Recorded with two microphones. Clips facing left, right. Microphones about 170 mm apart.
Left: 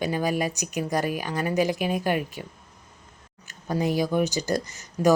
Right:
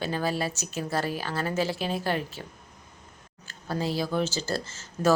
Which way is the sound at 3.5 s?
20° left (ahead or behind).